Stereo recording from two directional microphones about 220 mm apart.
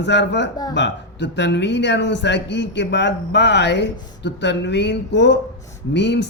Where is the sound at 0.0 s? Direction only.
50° left (ahead or behind).